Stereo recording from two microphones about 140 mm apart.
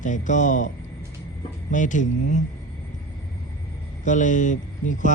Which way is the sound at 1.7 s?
65° left (ahead or behind).